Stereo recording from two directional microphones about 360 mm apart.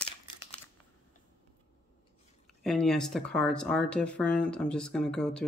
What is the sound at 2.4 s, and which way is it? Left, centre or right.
Speech, centre.